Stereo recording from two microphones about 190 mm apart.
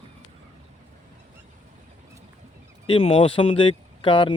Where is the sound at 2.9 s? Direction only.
30° left (ahead or behind).